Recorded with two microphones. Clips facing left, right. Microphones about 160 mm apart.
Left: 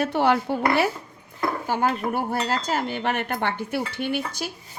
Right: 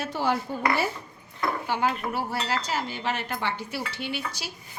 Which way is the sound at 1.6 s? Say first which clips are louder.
Left 4 dB; 45° left (ahead or behind).